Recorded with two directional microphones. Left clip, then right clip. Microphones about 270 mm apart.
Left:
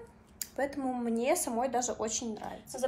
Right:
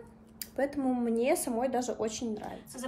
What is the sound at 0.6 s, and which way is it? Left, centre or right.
A woman's voice, centre.